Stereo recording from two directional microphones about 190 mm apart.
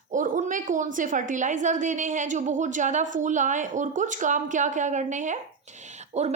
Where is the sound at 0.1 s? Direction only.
45° right (ahead or behind).